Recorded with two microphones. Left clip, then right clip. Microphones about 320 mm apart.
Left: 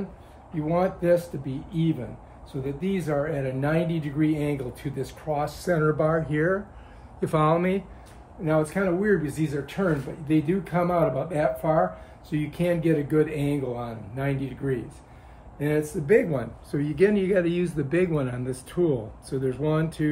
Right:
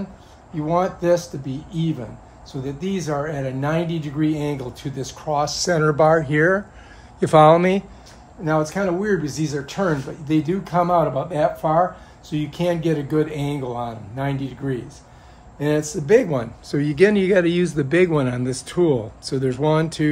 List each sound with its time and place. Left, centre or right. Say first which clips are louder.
0.6 s speech: right 4 dB; centre